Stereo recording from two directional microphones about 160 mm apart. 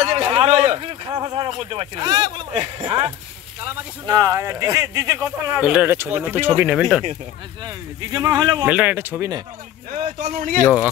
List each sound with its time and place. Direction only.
0.0 s a sound: 35° right (ahead or behind)
0.5 s speech: 40° right (ahead or behind)
4.1 s speech: 20° right (ahead or behind)
5.6 s speech: 5° right (ahead or behind)
7.6 s speech: 25° right (ahead or behind)
8.6 s speech: 10° right (ahead or behind)
10.2 s speech: 50° right (ahead or behind)
10.6 s speech: 10° right (ahead or behind)